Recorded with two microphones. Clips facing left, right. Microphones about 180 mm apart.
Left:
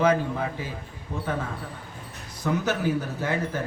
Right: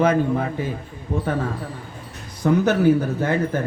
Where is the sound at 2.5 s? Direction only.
55° right (ahead or behind).